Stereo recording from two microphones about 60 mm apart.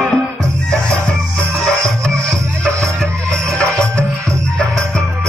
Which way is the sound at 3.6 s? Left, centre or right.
Centre.